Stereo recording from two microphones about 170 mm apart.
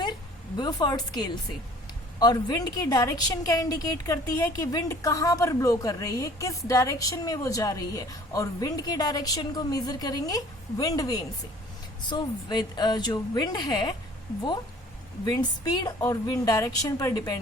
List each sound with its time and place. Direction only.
0.5 s a woman's voice: 25° left (ahead or behind)
15.3 s a woman's voice: 25° left (ahead or behind)